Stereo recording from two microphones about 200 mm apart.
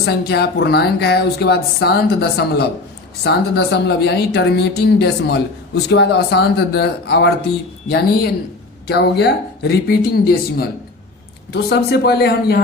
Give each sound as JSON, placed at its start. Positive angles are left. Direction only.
{"t": 0.0, "sound": "speech", "side_deg": 55}